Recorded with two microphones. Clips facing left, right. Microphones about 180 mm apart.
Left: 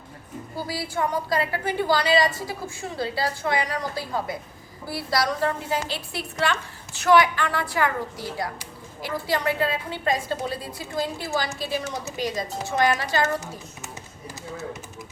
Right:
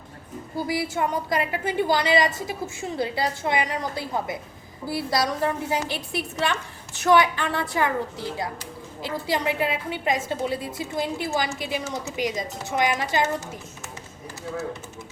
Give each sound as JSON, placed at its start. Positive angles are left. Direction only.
{"t": 0.5, "sound": "a woman's voice", "side_deg": -20}